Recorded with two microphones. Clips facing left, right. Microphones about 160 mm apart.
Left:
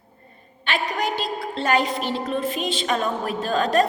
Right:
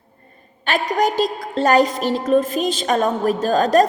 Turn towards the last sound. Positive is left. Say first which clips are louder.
# right 5 dB
turn(degrees=-40)  # may be behind; listen again after turning